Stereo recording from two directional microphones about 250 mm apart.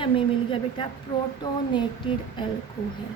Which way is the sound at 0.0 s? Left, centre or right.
Left.